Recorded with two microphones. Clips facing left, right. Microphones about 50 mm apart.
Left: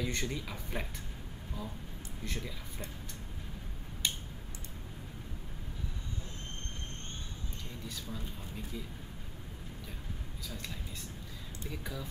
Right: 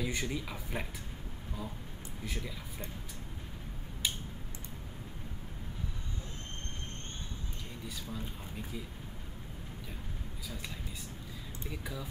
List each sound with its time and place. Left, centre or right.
0.0 s speech: centre
2.2 s speech: centre
4.0 s a sound: centre
7.8 s speech: centre
10.5 s speech: centre